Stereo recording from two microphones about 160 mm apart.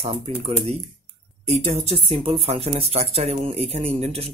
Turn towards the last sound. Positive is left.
turn(degrees=-40)  # may be behind; listen again after turning